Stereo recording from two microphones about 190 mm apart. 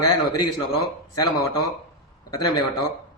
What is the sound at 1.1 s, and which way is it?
A man's voice, 20° left (ahead or behind).